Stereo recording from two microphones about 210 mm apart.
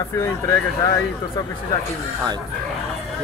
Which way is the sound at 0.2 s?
15° left (ahead or behind).